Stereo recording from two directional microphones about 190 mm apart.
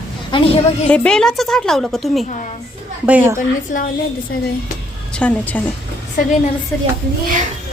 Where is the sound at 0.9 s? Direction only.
5° left (ahead or behind).